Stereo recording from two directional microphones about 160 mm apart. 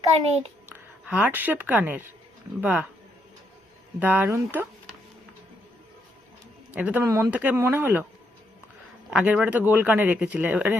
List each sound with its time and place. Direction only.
0.7 s speech: 10° right (ahead or behind)
4.0 s speech: 10° right (ahead or behind)
6.7 s speech: 10° right (ahead or behind)
9.0 s speech: 5° right (ahead or behind)